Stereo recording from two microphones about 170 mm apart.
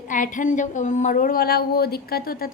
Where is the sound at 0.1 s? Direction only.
50° left (ahead or behind).